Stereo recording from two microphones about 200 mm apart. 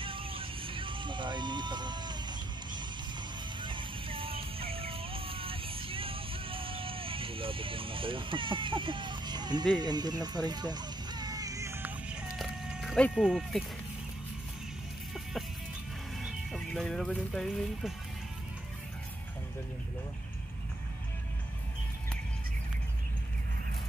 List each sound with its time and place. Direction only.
0.0 s vehicle: 25° right (ahead or behind)
3.6 s music: 25° right (ahead or behind); by 13.7 s centre (ahead or behind)
16.2 s speech: centre (ahead or behind)